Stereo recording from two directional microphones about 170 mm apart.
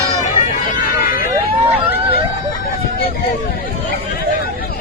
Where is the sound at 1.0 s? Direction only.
55° left (ahead or behind).